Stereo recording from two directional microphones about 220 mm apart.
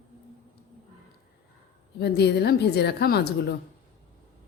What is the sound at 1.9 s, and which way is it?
A woman's voice, 50° left (ahead or behind).